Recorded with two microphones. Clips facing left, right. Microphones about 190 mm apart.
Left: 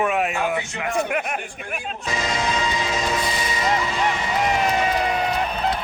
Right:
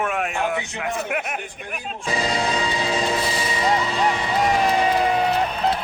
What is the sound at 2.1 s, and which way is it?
Music, 35° right (ahead or behind).